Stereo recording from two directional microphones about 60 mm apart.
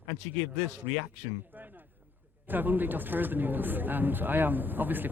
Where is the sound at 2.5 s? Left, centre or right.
Right.